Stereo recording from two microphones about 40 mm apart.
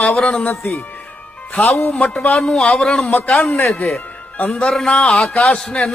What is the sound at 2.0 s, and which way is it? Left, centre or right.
Speech, left.